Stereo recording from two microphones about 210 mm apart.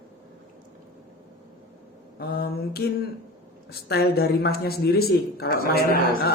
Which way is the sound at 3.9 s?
50° left (ahead or behind).